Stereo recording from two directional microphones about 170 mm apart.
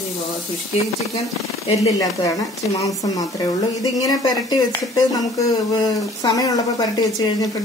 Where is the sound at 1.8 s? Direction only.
20° left (ahead or behind).